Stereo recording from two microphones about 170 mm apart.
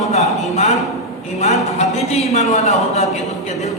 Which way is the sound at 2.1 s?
40° left (ahead or behind).